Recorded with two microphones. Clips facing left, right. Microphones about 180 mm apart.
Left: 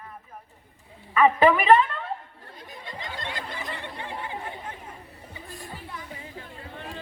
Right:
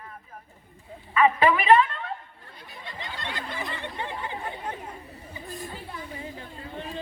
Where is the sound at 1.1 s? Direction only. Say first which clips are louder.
Left 2 dB; 45° left (ahead or behind).